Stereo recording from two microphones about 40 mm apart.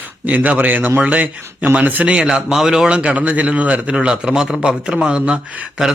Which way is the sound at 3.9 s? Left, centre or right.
Right.